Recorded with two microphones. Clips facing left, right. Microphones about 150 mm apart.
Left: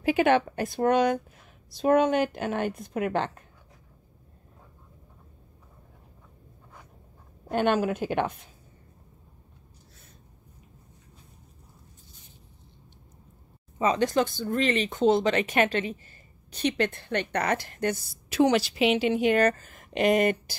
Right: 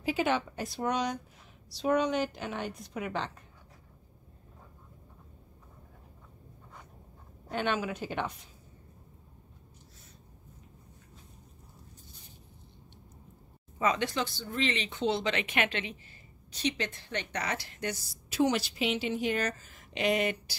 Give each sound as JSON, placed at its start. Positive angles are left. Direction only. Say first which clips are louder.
{"t": 0.0, "sound": "a woman's voice", "louder": "left 7 dB", "side_deg": 60}
{"t": 7.5, "sound": "speech", "louder": "left 7 dB", "side_deg": 50}
{"t": 13.7, "sound": "speech", "louder": "left 4 dB", "side_deg": 30}
{"t": 14.0, "sound": "speech", "louder": "left 8 dB", "side_deg": 50}
{"t": 16.5, "sound": "a woman's voice", "louder": "left 7 dB", "side_deg": 55}